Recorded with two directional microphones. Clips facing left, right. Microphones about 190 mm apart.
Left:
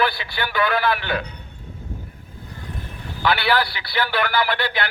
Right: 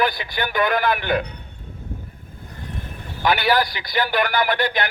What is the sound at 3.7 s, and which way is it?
Speech, 45° right (ahead or behind).